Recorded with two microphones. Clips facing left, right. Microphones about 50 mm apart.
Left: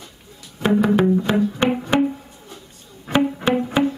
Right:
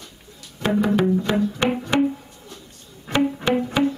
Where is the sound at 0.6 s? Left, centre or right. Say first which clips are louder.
Left 3 dB; centre.